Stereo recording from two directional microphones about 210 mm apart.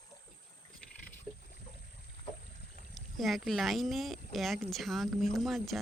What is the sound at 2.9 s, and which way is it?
Speech, centre (ahead or behind).